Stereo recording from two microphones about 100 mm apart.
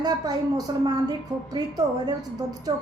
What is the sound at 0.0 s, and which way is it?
A woman's voice, 40° right (ahead or behind).